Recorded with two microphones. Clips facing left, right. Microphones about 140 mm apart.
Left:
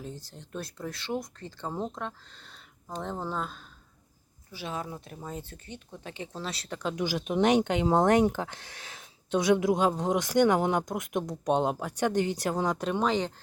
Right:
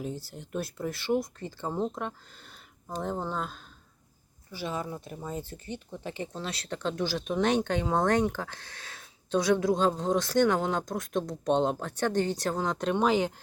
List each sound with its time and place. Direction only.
0.0 s speech: 10° right (ahead or behind)